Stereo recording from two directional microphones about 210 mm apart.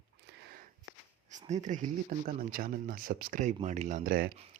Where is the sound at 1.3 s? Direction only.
35° right (ahead or behind).